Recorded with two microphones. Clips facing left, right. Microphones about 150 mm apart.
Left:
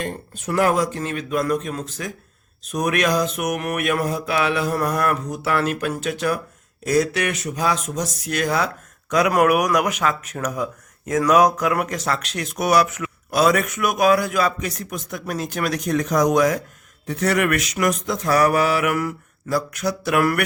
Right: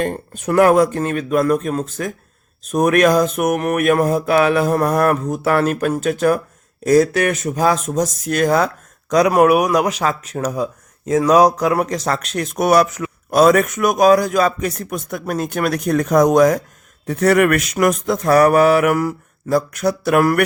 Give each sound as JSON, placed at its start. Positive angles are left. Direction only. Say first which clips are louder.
{"t": 0.0, "sound": "mantra", "louder": "right 7 dB", "side_deg": -55}
{"t": 8.2, "sound": "speech", "louder": "right 5 dB", "side_deg": -45}
{"t": 9.3, "sound": "speech", "louder": "right 3 dB", "side_deg": -25}
{"t": 13.3, "sound": "mantra", "louder": "right 6 dB", "side_deg": -45}